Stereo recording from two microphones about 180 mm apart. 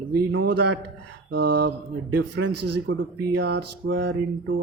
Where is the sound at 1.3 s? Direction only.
60° right (ahead or behind).